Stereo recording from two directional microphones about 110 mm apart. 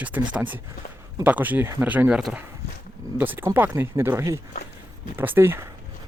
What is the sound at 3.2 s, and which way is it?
Speech, 20° right (ahead or behind).